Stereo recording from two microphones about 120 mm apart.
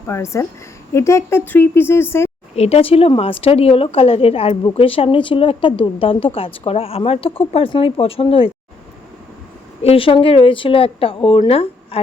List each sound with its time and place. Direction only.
0.1 s a woman's voice: 25° left (ahead or behind)
2.6 s speech: 60° left (ahead or behind)
9.8 s speech: 50° left (ahead or behind)